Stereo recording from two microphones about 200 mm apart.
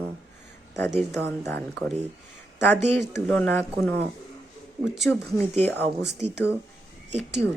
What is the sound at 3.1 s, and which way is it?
Speech, 5° left (ahead or behind).